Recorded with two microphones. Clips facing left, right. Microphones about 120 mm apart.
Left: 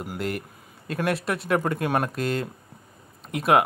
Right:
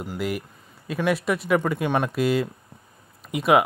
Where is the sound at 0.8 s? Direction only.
Centre (ahead or behind).